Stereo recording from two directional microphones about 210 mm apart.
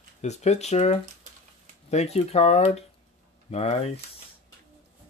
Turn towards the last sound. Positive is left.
turn(degrees=30)  # may be behind; listen again after turning